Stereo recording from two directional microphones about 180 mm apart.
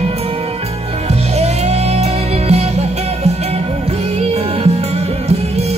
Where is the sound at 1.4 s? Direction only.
35° right (ahead or behind).